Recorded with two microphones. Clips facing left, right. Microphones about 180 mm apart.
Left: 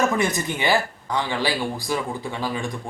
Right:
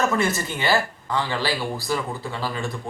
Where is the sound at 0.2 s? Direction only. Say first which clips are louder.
Left 1 dB; 15° left (ahead or behind).